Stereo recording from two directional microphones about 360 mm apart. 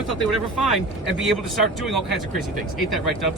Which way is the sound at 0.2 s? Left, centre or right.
Centre.